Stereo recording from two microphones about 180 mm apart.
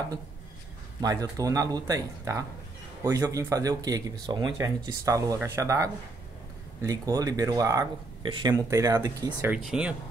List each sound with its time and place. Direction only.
1.0 s speech: 20° right (ahead or behind)
9.5 s speech: 5° right (ahead or behind)